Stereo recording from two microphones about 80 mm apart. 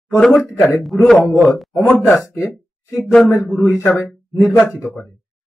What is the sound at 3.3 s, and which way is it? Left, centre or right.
Speech, left.